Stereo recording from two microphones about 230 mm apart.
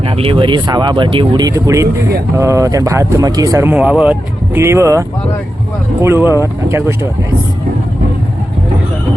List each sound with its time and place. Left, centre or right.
0.0 s speech: right
6.2 s speech: centre
6.7 s speech: centre